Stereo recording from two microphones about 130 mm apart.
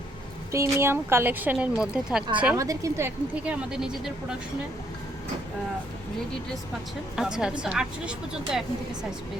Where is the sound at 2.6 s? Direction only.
25° right (ahead or behind).